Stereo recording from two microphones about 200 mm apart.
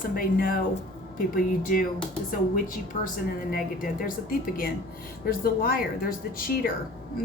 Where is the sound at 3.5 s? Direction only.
45° left (ahead or behind).